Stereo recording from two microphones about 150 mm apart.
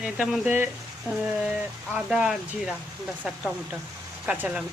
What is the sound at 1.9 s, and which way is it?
Speech, 5° right (ahead or behind).